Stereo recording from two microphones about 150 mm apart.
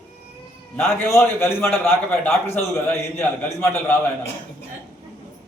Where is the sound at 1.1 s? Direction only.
15° left (ahead or behind).